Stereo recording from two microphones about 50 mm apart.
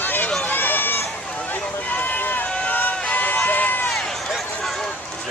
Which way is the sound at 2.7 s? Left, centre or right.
Left.